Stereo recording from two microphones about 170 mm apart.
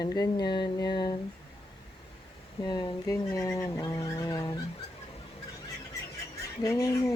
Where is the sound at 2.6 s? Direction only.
25° left (ahead or behind).